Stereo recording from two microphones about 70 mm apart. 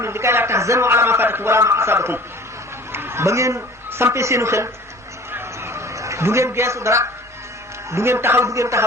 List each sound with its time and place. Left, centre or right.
0.0 s a man's voice: right
5.3 s a sound: right
7.9 s a man's voice: right